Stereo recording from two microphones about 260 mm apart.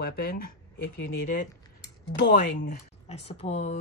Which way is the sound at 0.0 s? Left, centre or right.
Left.